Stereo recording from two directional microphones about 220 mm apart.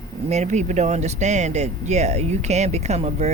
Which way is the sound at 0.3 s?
30° right (ahead or behind).